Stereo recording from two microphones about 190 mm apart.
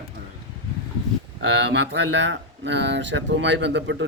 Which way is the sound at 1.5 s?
65° right (ahead or behind).